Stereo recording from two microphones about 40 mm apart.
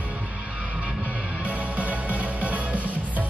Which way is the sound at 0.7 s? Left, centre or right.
Right.